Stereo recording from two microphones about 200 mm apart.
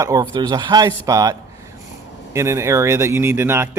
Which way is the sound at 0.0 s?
20° right (ahead or behind).